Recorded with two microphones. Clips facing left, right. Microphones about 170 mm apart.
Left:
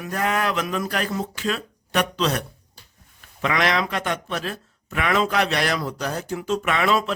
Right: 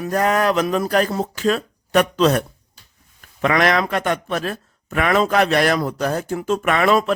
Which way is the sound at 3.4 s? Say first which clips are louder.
Right 5 dB; 50° right (ahead or behind).